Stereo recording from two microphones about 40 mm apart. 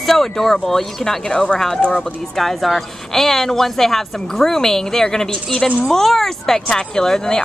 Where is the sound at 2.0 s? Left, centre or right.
Centre.